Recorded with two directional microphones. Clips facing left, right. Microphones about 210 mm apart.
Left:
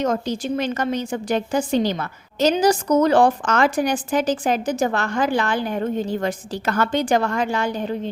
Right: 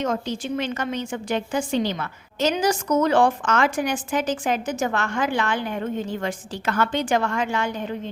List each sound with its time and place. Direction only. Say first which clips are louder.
0.0 s a woman's voice: left 3 dB; 40° left (ahead or behind)